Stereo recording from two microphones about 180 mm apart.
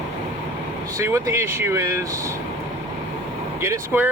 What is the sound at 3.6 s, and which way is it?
Speech, 10° right (ahead or behind).